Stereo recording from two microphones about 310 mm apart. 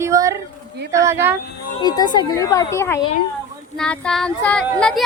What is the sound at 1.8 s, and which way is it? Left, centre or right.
Speech, centre.